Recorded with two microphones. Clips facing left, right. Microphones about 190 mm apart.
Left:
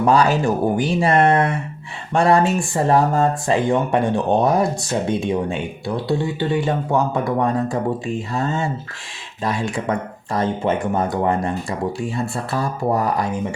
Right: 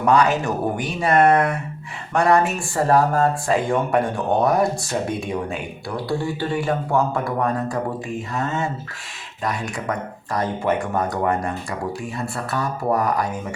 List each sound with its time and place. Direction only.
0.0 s speech: 30° left (ahead or behind)